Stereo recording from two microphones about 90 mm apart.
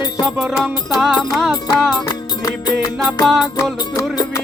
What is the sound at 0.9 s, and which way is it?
Music, centre (ahead or behind).